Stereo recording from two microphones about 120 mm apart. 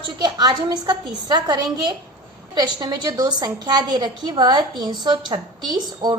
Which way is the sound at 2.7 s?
35° right (ahead or behind).